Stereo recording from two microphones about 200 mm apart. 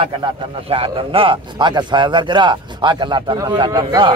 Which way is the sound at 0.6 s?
25° right (ahead or behind).